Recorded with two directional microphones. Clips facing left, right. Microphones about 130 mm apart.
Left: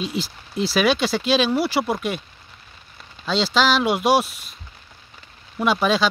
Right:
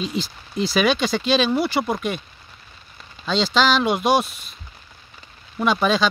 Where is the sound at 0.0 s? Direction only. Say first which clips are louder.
Even; 5° left (ahead or behind).